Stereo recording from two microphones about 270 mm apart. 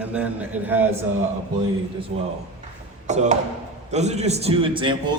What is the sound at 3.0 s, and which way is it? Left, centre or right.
A man's voice, right.